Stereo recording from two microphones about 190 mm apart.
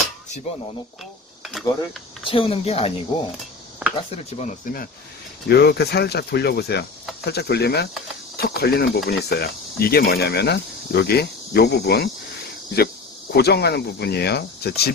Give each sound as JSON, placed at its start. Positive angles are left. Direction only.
{"t": 1.8, "sound": "speech", "side_deg": 30}
{"t": 3.9, "sound": "speech", "side_deg": 35}
{"t": 5.5, "sound": "speech", "side_deg": 60}